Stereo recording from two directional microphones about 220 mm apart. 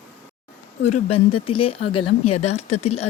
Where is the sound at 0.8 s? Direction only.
30° left (ahead or behind).